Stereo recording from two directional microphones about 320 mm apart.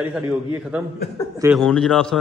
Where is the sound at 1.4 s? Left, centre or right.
Centre.